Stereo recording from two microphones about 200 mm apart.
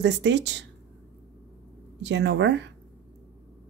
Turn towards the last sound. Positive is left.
turn(degrees=-65)  # may be behind; listen again after turning